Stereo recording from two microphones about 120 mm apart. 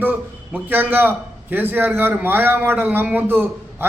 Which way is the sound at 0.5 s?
15° right (ahead or behind).